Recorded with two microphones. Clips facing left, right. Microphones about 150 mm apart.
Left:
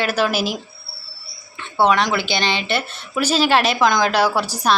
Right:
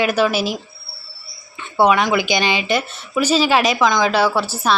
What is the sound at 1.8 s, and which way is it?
A woman's voice, 5° right (ahead or behind).